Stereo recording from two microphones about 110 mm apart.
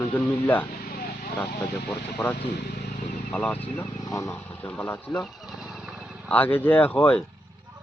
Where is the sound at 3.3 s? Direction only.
15° left (ahead or behind).